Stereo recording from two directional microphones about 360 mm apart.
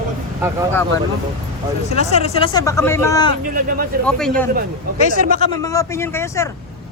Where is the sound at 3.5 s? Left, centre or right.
Right.